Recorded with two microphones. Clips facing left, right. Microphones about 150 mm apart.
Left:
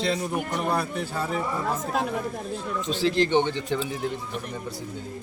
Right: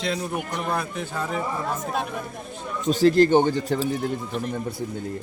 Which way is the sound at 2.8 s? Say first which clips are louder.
Right 7 dB; 45° right (ahead or behind).